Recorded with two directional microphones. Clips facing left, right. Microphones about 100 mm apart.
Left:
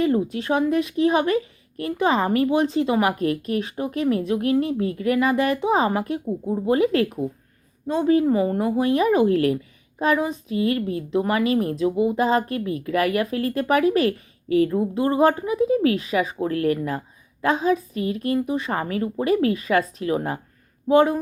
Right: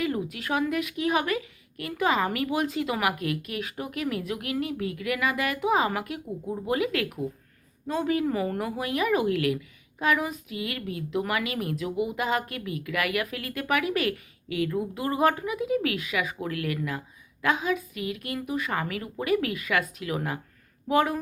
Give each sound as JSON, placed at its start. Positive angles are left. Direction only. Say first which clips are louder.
{"t": 0.0, "sound": "speech", "louder": "left 8 dB", "side_deg": 30}